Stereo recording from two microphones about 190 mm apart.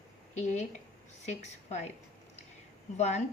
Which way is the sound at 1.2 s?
35° left (ahead or behind).